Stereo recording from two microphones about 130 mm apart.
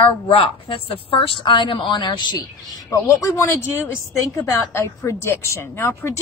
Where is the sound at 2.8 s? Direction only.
20° left (ahead or behind).